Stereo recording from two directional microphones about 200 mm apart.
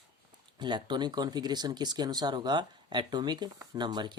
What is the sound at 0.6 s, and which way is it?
Speech, 20° right (ahead or behind).